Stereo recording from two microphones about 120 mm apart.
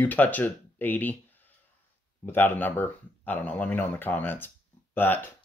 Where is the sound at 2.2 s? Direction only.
15° left (ahead or behind).